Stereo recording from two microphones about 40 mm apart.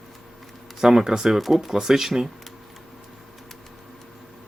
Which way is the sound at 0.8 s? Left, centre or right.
Centre.